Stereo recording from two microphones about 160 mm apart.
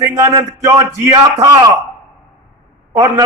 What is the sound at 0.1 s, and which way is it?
A man's voice, 20° right (ahead or behind).